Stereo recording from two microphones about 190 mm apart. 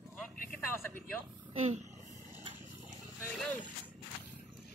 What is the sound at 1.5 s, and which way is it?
Speech, 35° right (ahead or behind).